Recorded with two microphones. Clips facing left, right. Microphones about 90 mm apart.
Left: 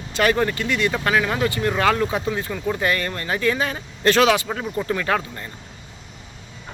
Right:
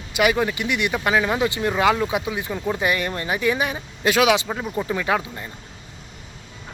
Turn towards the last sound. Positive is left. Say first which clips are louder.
# even
turn(degrees=-10)  # may be behind; listen again after turning